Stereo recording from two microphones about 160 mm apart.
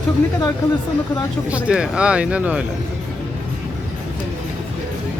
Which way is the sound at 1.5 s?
5° right (ahead or behind).